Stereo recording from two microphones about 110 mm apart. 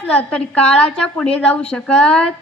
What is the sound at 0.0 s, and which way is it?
A woman's voice, 10° left (ahead or behind).